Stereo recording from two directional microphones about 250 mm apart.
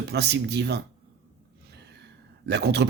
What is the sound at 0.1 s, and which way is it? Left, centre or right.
Speech, right.